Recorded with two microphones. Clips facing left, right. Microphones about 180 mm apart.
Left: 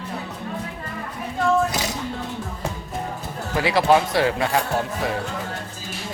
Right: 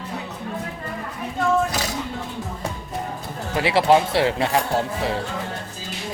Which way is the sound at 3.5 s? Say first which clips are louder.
Right 1 dB; 25° right (ahead or behind).